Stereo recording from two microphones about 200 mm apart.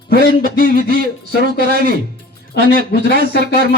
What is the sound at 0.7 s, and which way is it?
Speech, 45° right (ahead or behind).